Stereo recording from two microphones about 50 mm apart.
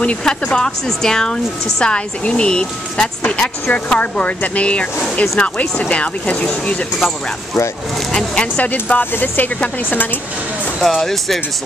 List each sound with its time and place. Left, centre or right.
0.2 s a woman's voice: centre
8.1 s a woman's voice: centre
9.1 s speech: left
10.8 s speech: centre